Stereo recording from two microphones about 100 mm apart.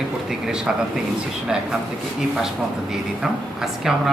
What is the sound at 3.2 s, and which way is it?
Speech, 5° right (ahead or behind).